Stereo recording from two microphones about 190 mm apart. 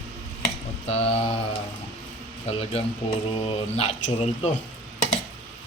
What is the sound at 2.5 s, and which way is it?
Speech, 30° left (ahead or behind).